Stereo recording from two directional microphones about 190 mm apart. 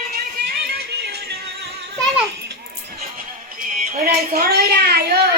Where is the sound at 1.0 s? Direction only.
60° right (ahead or behind).